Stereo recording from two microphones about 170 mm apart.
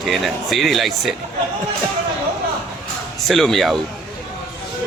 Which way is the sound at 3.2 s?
Centre (ahead or behind).